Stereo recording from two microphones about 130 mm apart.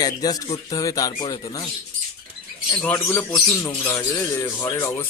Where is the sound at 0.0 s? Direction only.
30° left (ahead or behind).